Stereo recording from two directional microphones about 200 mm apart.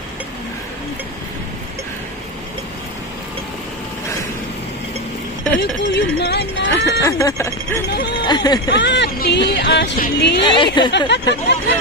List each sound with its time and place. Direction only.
5.6 s speech: 55° left (ahead or behind)
7.0 s a woman's voice: 15° left (ahead or behind)
8.6 s speech: 60° left (ahead or behind)
10.4 s a woman's voice: 25° left (ahead or behind)
10.9 s speech: 60° left (ahead or behind)